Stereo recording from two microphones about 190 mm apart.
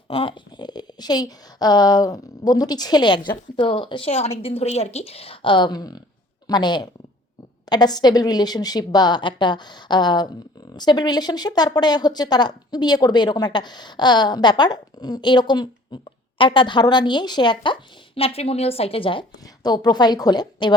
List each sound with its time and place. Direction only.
0.1 s speech: 30° left (ahead or behind)